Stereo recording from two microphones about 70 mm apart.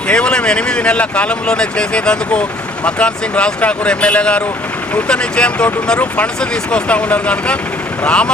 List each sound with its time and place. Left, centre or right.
0.1 s speech: centre